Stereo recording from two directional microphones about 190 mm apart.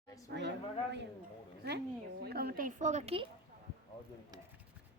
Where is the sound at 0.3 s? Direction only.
65° right (ahead or behind).